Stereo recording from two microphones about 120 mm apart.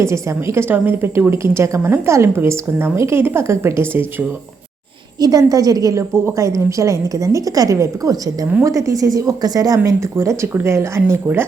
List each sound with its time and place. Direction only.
0.0 s a woman's voice: 25° right (ahead or behind)
5.2 s a woman's voice: 30° right (ahead or behind)